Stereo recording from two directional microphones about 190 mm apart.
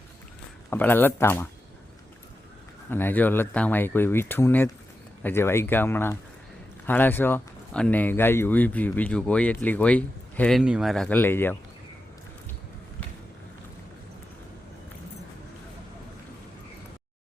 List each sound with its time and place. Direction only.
0.7 s speech: 10° left (ahead or behind)
2.9 s speech: 10° left (ahead or behind)
10.6 s speech: 5° right (ahead or behind); by 11.5 s 10° left (ahead or behind)